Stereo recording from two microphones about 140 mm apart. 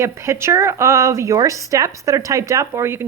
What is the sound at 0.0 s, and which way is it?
Speech, 20° right (ahead or behind).